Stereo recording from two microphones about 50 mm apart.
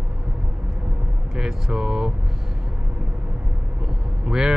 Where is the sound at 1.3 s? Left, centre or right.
Centre.